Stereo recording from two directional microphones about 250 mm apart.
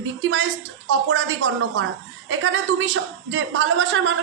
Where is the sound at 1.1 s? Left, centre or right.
Right.